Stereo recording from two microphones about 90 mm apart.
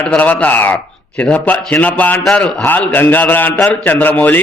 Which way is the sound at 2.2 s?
5° left (ahead or behind).